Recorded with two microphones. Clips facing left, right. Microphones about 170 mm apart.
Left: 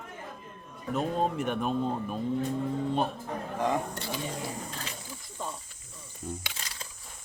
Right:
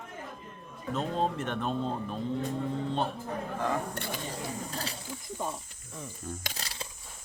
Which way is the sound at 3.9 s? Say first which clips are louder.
Even; 55° right (ahead or behind).